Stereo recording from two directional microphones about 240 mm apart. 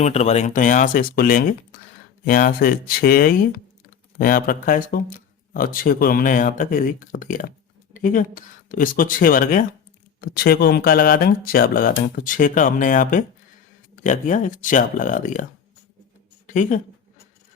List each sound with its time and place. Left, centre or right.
0.0 s speech: left
16.5 s speech: left